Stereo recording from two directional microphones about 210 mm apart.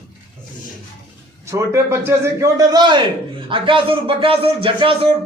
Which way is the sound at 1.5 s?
15° right (ahead or behind).